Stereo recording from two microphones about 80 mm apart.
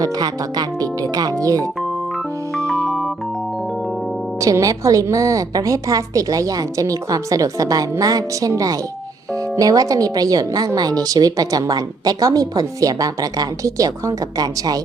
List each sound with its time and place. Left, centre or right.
0.0 s a woman's voice: right
4.4 s a woman's voice: right